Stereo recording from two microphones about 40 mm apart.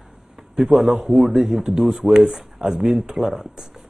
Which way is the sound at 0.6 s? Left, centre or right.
Centre.